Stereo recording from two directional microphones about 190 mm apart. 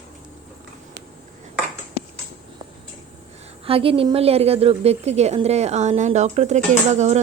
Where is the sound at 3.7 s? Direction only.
30° right (ahead or behind).